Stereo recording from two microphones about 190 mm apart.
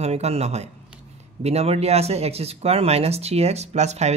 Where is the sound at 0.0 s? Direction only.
35° right (ahead or behind).